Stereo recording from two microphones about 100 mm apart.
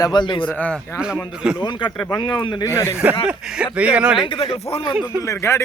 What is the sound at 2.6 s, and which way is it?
Speech, 25° left (ahead or behind).